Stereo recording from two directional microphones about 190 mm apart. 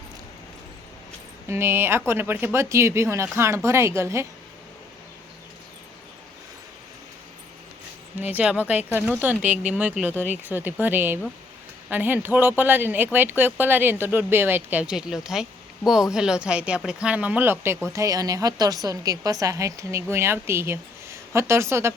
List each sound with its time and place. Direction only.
1.5 s a woman's voice: 10° right (ahead or behind)
8.2 s a woman's voice: 10° right (ahead or behind)